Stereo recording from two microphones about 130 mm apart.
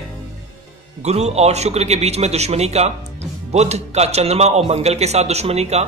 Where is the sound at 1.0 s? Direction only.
55° right (ahead or behind).